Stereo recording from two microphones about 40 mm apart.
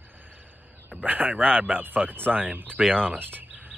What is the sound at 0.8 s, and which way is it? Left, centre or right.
Speech, right.